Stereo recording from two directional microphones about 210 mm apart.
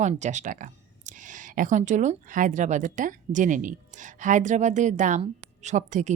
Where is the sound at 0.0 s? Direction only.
35° right (ahead or behind).